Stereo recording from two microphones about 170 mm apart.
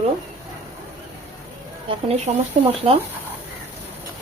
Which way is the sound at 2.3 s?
40° right (ahead or behind).